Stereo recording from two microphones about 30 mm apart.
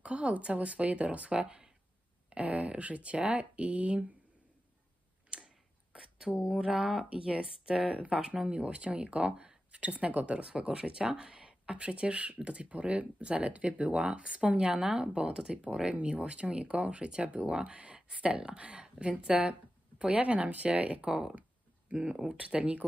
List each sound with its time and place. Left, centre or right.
0.0 s speech: right
5.9 s a sound: right
6.7 s speech: centre
7.1 s speech: right
9.7 s speech: right
10.4 s speech: right
14.8 s speech: centre
15.1 s speech: right
17.5 s speech: right
21.9 s speech: right